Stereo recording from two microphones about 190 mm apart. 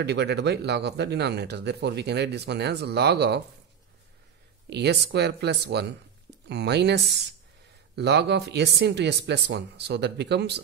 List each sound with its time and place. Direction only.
0.0 s speech: 60° right (ahead or behind)
4.6 s speech: 60° right (ahead or behind)